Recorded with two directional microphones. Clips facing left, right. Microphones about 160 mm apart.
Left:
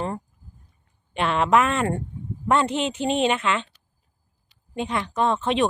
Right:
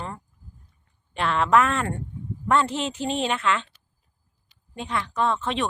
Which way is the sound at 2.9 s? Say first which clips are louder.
Left 4 dB; 70° left (ahead or behind).